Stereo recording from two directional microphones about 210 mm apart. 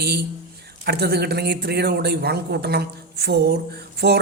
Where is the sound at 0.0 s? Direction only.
50° right (ahead or behind).